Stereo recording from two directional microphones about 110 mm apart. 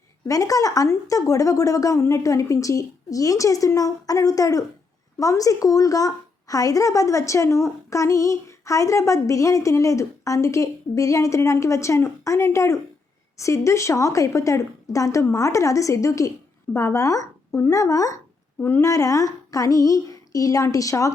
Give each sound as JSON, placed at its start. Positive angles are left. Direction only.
{"t": 0.3, "sound": "a woman's voice", "side_deg": 30}